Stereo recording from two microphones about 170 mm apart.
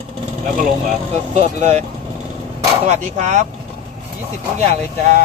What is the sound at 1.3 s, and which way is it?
Speech, 40° right (ahead or behind).